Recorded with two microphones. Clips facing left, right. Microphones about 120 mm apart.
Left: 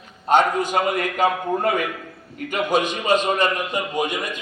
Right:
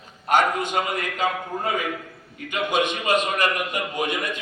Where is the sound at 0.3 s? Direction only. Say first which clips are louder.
Left 3 dB; 25° left (ahead or behind).